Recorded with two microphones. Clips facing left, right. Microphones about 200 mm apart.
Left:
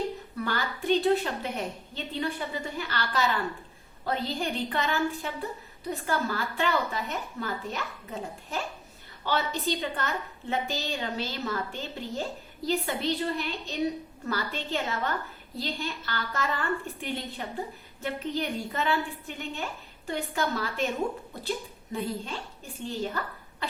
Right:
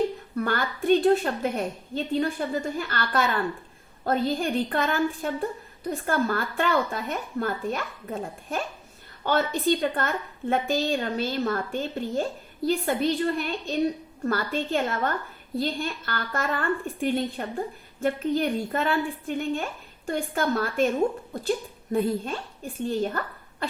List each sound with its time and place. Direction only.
0.3 s a woman's voice: 50° right (ahead or behind)
21.9 s a woman's voice: 50° right (ahead or behind)